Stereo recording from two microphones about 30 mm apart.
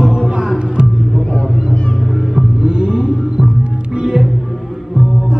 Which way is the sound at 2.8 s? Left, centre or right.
Centre.